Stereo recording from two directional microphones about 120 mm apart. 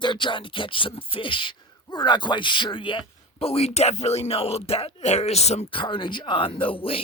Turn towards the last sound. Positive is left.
turn(degrees=10)  # may be behind; listen again after turning